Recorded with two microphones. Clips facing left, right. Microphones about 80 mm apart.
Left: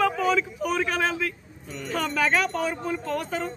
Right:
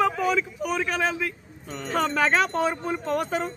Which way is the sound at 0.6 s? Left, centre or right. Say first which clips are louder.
Left 1 dB; centre.